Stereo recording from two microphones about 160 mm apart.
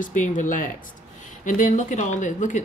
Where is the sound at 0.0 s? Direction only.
50° left (ahead or behind).